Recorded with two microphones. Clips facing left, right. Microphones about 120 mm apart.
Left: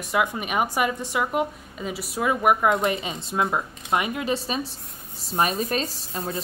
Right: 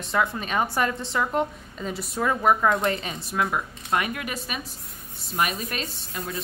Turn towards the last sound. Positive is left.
turn(degrees=35)  # may be behind; listen again after turning